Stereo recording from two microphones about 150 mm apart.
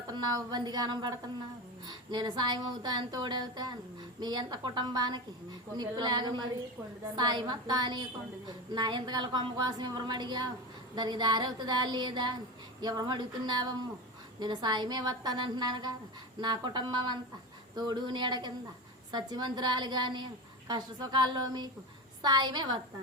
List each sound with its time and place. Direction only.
0.1 s a woman's voice: 25° right (ahead or behind)